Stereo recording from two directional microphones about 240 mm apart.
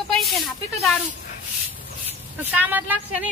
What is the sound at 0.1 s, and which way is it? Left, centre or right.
Speech, centre.